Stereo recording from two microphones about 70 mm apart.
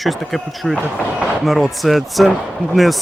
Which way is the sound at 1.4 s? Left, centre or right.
Centre.